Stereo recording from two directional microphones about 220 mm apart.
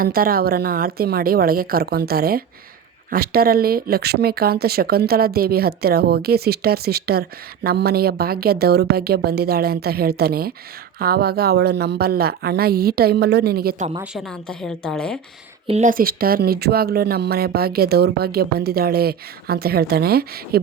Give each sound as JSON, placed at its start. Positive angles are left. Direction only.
{"t": 0.0, "sound": "speech", "side_deg": -40}
{"t": 14.0, "sound": "speech", "side_deg": 0}
{"t": 15.6, "sound": "speech", "side_deg": -30}